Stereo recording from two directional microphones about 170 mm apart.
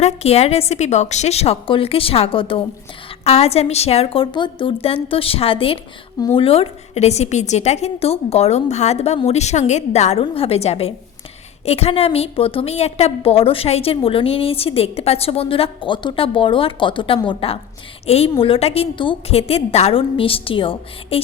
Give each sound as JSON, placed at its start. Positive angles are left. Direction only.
{"t": 0.0, "sound": "a woman's voice", "side_deg": 40}